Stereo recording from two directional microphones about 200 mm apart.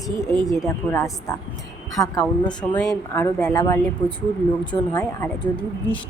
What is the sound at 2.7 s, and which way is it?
Speech, centre (ahead or behind).